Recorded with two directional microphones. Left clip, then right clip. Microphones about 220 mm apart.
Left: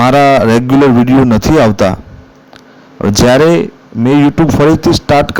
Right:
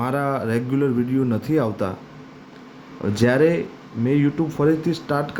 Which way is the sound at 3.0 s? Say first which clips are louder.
Left 11 dB; 45° left (ahead or behind).